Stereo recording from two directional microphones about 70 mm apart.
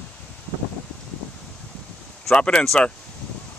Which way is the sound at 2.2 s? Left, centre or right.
Centre.